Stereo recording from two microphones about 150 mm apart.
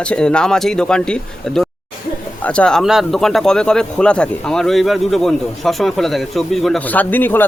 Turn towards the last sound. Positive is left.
turn(degrees=10)  # may be behind; listen again after turning